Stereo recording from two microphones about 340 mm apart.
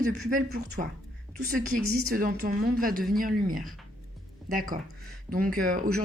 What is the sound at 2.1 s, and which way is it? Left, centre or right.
Speech, right.